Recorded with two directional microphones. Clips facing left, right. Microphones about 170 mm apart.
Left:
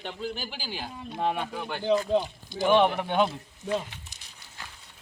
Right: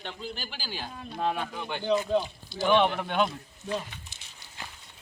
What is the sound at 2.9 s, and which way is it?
Speech, 15° left (ahead or behind).